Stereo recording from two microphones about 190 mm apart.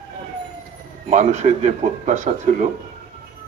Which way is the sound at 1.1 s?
35° right (ahead or behind).